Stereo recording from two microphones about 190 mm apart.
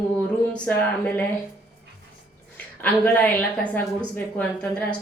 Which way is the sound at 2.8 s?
10° left (ahead or behind).